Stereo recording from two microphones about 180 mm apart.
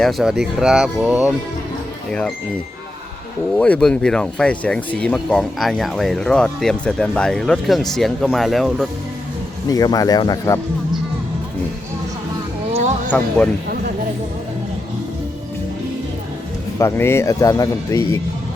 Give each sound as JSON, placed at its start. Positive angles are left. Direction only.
{"t": 0.0, "sound": "speech", "side_deg": 0}
{"t": 3.6, "sound": "speech", "side_deg": 5}
{"t": 9.6, "sound": "speech", "side_deg": 20}
{"t": 13.1, "sound": "speech", "side_deg": 10}
{"t": 16.7, "sound": "speech", "side_deg": 15}